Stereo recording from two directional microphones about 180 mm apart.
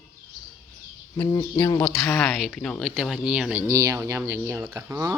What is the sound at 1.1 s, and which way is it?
Speech, 20° left (ahead or behind).